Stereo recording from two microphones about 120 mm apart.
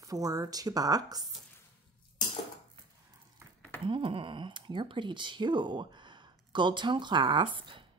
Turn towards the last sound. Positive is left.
turn(degrees=-45)  # may be behind; listen again after turning